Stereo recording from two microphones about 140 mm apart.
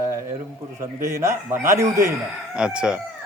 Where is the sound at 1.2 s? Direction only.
20° right (ahead or behind).